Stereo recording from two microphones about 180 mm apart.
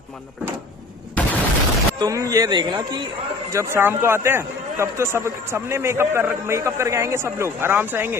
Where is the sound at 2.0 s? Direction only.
20° right (ahead or behind).